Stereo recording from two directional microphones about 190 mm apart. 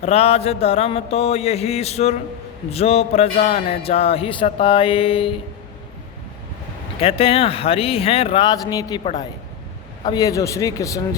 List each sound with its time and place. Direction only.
0.0 s a man's voice: 30° left (ahead or behind)
7.0 s a man's voice: 30° left (ahead or behind)